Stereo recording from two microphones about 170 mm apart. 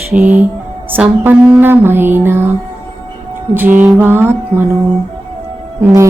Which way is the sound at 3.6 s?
10° right (ahead or behind).